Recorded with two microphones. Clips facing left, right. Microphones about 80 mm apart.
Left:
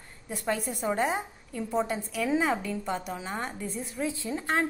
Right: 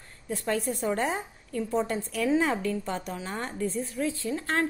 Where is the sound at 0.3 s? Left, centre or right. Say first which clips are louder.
Right 2 dB; centre.